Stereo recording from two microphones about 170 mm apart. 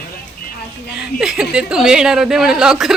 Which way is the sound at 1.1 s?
5° right (ahead or behind).